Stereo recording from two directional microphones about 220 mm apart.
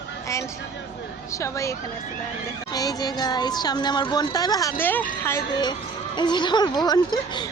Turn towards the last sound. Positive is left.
turn(degrees=20)  # may be behind; listen again after turning